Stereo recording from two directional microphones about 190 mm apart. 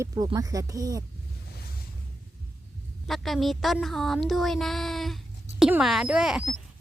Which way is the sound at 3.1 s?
Centre (ahead or behind).